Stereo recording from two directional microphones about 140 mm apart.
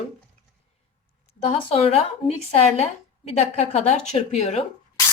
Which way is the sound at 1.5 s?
45° left (ahead or behind).